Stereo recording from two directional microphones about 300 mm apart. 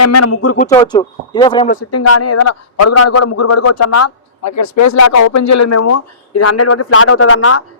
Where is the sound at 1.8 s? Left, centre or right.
Left.